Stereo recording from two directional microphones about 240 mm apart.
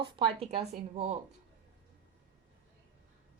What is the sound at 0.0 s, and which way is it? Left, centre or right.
A woman's voice, centre.